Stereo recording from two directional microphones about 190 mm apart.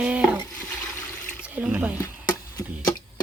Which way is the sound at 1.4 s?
5° right (ahead or behind).